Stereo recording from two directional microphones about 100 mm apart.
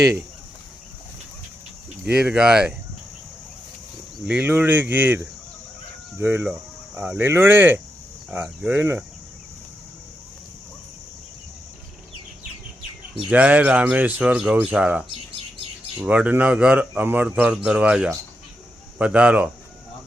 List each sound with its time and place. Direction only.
2.0 s speech: 10° right (ahead or behind)
4.3 s speech: 15° right (ahead or behind)
13.3 s speech: 15° right (ahead or behind)